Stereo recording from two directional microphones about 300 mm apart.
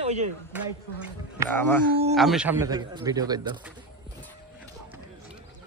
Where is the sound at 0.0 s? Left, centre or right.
Right.